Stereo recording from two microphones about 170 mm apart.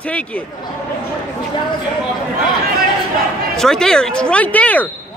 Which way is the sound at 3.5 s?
5° left (ahead or behind).